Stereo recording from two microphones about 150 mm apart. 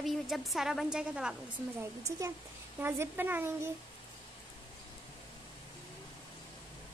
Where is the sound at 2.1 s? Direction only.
20° right (ahead or behind).